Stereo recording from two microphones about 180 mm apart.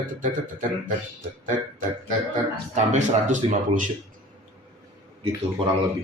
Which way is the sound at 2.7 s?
40° right (ahead or behind).